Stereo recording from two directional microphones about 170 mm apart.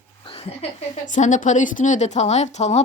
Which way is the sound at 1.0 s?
45° left (ahead or behind).